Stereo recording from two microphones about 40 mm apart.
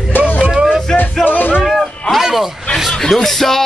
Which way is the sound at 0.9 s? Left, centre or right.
Left.